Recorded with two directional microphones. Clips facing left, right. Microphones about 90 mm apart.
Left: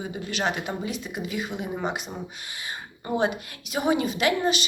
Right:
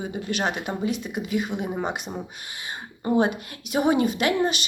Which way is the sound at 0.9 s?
50° right (ahead or behind).